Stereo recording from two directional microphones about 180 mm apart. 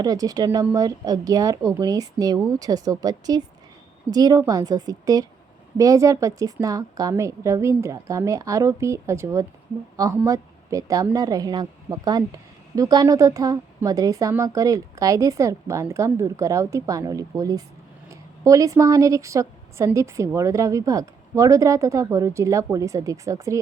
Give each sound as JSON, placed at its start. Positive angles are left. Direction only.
{"t": 0.0, "sound": "a woman's voice", "side_deg": -20}